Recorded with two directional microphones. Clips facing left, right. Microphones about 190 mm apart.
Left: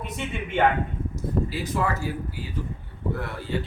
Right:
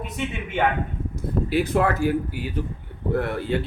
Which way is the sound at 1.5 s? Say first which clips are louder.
Right 6 dB; 60° right (ahead or behind).